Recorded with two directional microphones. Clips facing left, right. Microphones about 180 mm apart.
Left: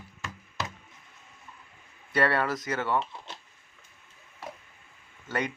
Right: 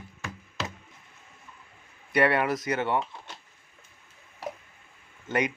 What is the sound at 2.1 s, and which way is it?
Speech, 15° right (ahead or behind).